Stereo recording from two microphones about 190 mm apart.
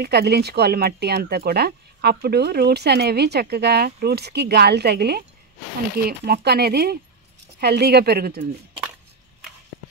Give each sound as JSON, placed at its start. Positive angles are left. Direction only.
{"t": 0.0, "sound": "speech", "side_deg": -60}